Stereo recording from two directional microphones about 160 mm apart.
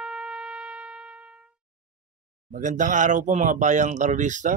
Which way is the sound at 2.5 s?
50° right (ahead or behind).